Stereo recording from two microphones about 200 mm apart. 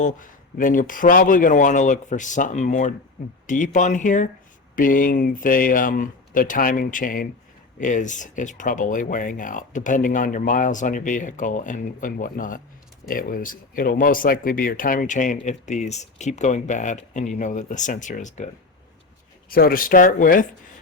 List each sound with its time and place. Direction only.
0.0 s speech: 40° left (ahead or behind)
19.5 s speech: 45° left (ahead or behind)